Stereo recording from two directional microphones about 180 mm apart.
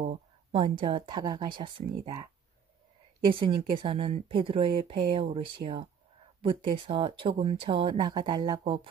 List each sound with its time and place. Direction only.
0.5 s speech: 30° right (ahead or behind)
3.3 s speech: 30° right (ahead or behind)